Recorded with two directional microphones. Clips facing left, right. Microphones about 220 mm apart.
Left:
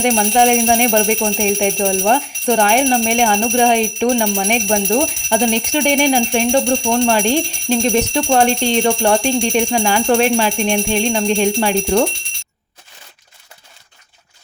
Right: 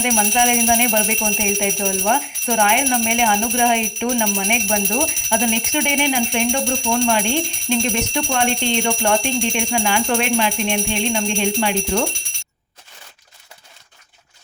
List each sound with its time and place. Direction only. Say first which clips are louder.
0.0 s speech: left 5 dB; 40° left (ahead or behind)